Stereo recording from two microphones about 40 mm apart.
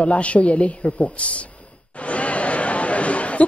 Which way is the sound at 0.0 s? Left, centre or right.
Left.